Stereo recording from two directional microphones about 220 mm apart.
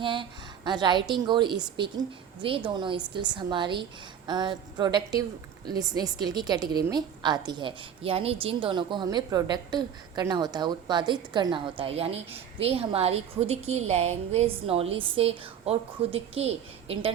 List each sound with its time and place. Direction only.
0.0 s a woman's voice: 20° right (ahead or behind)